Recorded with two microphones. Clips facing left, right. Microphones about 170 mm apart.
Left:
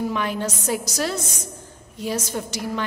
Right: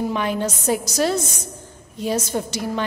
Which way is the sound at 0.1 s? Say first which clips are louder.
Right 2 dB; 20° right (ahead or behind).